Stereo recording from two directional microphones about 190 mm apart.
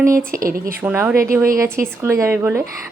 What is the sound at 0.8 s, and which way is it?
Speech, 10° right (ahead or behind).